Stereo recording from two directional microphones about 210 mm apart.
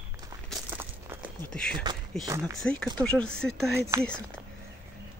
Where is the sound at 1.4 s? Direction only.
5° left (ahead or behind).